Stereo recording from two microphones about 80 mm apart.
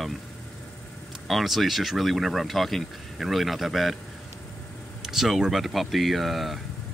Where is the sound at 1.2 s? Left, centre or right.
Centre.